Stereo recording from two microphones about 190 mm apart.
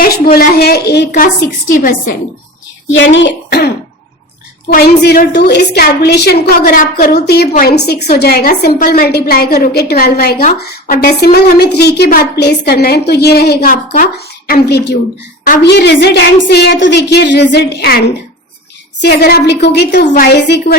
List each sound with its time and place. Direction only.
0.3 s a woman's voice: 55° left (ahead or behind)
2.9 s speech: 75° left (ahead or behind)
4.7 s a woman's voice: 55° left (ahead or behind)